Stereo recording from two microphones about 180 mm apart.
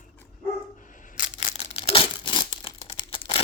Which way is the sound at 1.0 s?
40° left (ahead or behind).